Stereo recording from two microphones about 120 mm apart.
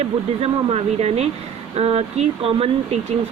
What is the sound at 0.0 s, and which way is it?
Speech, 60° right (ahead or behind).